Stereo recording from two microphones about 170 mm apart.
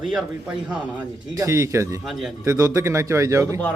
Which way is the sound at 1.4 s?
15° right (ahead or behind).